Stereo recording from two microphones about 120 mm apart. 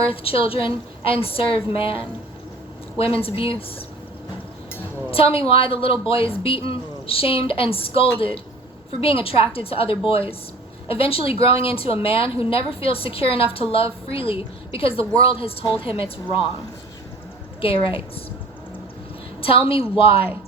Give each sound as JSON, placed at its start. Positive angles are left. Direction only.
{"t": 0.0, "sound": "a woman's voice", "side_deg": 50}
{"t": 3.0, "sound": "a woman's voice", "side_deg": 50}
{"t": 5.1, "sound": "a woman's voice", "side_deg": 50}
{"t": 17.6, "sound": "a woman's voice", "side_deg": 50}
{"t": 19.4, "sound": "a woman's voice", "side_deg": 50}